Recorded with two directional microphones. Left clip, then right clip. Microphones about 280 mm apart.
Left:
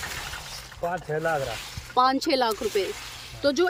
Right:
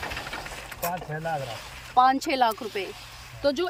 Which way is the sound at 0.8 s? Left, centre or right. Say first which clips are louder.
Left 4 dB; centre.